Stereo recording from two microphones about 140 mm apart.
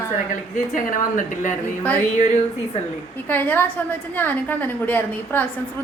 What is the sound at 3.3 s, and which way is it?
A woman's voice, 15° left (ahead or behind).